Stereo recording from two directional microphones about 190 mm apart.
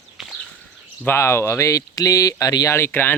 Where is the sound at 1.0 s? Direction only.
15° left (ahead or behind).